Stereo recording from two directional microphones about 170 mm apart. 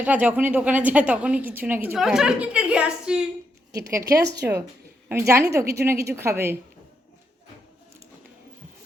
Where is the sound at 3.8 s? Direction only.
15° right (ahead or behind).